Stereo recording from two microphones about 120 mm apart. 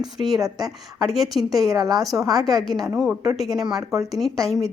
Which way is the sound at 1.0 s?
Centre (ahead or behind).